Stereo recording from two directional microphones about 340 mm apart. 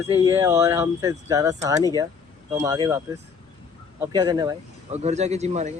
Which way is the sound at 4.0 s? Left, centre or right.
Centre.